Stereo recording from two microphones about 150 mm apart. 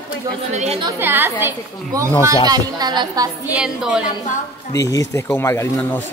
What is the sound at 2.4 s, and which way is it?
Speech, 25° right (ahead or behind).